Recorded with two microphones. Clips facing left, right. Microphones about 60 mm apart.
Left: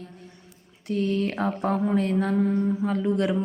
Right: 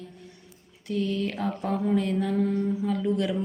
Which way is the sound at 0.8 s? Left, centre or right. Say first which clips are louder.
Left 3 dB; left.